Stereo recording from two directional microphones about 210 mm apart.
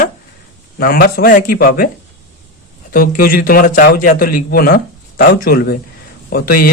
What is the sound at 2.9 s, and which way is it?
A man's voice, 45° left (ahead or behind).